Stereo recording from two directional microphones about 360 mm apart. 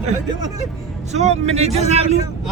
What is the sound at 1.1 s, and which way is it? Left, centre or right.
Speech, centre.